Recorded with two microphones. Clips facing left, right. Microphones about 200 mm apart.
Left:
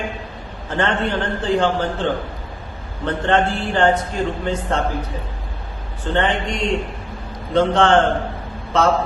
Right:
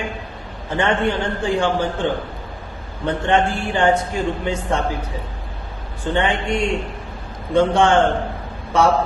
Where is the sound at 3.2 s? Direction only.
10° right (ahead or behind).